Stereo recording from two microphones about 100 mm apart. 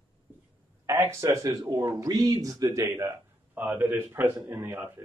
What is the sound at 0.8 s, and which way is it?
A man's voice, 25° right (ahead or behind).